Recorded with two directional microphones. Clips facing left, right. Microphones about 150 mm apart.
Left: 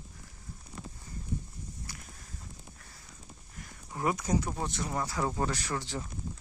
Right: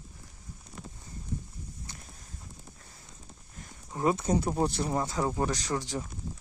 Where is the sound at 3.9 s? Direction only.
25° right (ahead or behind).